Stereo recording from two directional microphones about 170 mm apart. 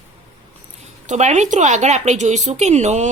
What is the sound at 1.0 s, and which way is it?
Speech, 45° right (ahead or behind).